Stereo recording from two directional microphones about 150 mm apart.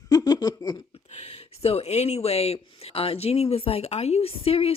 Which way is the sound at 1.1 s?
45° left (ahead or behind).